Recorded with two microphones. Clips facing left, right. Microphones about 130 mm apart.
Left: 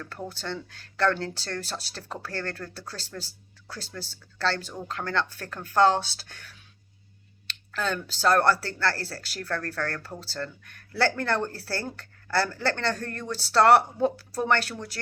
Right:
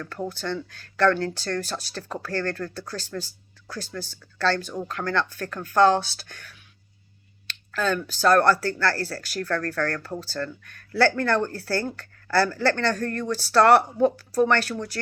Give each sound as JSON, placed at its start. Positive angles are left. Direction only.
{"t": 0.3, "sound": "speech", "side_deg": 25}